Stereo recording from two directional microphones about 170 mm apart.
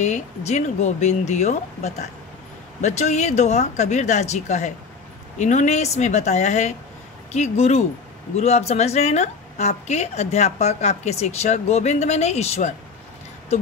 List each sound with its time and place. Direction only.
0.0 s a woman's voice: 40° left (ahead or behind)